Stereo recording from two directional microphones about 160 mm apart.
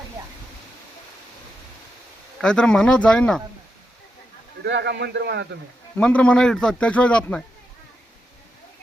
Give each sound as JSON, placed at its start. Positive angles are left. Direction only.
{"t": 2.4, "sound": "speech", "side_deg": 5}
{"t": 4.6, "sound": "a man's voice", "side_deg": -90}
{"t": 6.0, "sound": "speech", "side_deg": 5}